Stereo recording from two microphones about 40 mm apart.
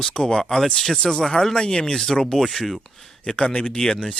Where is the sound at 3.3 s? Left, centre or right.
Left.